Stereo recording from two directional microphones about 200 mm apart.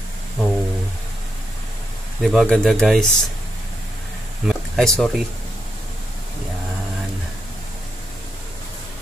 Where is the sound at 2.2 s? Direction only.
Centre (ahead or behind).